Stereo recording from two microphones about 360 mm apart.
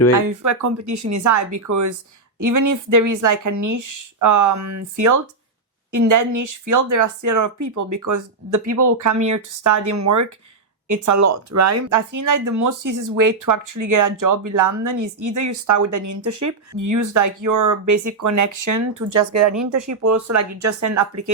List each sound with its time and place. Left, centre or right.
0.3 s speech: right